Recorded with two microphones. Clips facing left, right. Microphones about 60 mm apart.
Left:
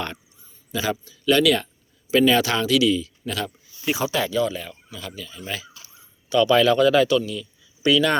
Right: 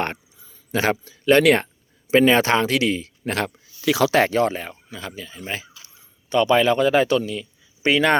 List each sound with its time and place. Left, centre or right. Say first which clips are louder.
0.7 s speech: right 4 dB; right
3.8 s speech: right 6 dB; right
4.2 s speech: right 4 dB; right